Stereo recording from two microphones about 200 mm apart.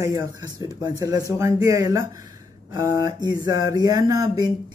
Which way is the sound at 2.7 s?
20° right (ahead or behind).